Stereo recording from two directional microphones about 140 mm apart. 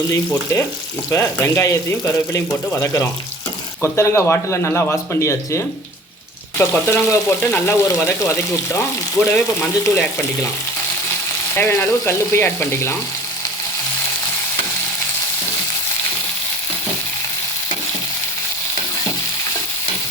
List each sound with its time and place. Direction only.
0.3 s frying: 20° left (ahead or behind)
1.1 s speech: 20° left (ahead or behind)
6.6 s frying: 15° left (ahead or behind)
11.5 s frying: 15° left (ahead or behind)